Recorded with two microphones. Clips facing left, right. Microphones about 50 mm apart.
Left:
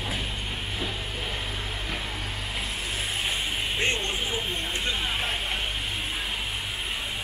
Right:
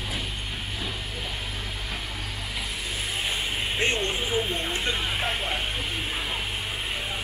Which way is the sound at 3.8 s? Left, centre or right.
Right.